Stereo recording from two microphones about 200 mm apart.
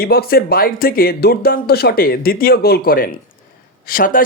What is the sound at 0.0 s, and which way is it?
Speech, 50° left (ahead or behind).